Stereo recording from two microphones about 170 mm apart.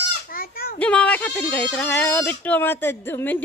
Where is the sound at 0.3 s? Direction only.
60° left (ahead or behind).